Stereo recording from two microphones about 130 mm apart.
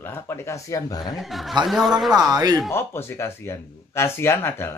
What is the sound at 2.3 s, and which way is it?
Speech, 30° right (ahead or behind).